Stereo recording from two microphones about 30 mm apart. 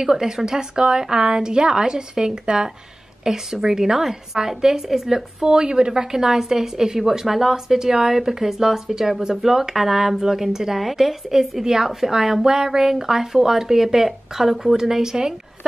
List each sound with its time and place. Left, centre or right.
0.0 s a woman's voice: centre
5.4 s a woman's voice: right
6.2 s speech: centre
14.8 s a woman's voice: centre